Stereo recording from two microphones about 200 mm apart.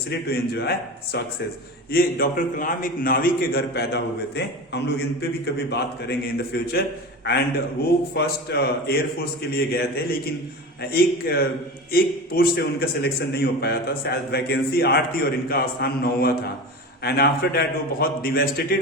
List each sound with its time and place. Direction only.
0.1 s a man's voice: 50° left (ahead or behind)